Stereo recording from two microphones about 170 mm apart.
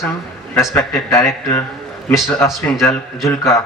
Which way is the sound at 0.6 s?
15° left (ahead or behind).